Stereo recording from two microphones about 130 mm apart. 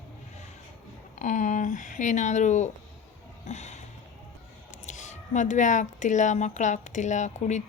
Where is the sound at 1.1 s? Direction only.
75° left (ahead or behind).